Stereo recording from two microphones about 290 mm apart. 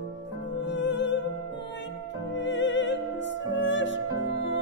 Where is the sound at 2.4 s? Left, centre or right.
Left.